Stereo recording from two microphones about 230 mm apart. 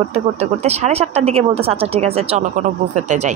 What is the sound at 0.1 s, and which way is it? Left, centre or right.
Speech, right.